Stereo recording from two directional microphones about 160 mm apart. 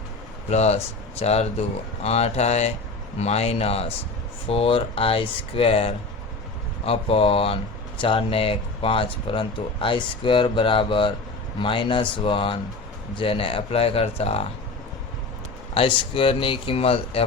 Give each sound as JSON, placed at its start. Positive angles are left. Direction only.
{"t": 0.5, "sound": "speech", "side_deg": 45}
{"t": 15.7, "sound": "speech", "side_deg": 35}